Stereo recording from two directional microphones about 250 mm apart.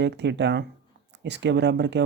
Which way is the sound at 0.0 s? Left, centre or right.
Right.